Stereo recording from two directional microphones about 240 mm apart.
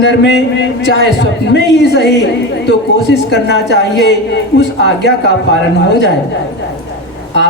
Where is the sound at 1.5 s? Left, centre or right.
Left.